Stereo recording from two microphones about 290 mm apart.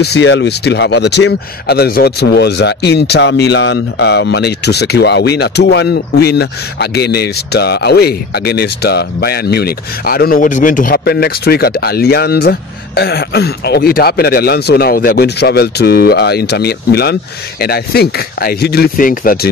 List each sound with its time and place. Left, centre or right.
0.0 s speech: left